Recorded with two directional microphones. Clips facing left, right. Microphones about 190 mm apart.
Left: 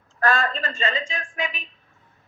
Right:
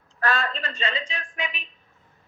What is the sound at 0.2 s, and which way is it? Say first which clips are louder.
A woman's voice: left 3 dB; 45° left (ahead or behind).